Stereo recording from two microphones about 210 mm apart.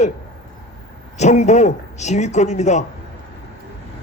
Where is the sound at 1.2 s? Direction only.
35° left (ahead or behind).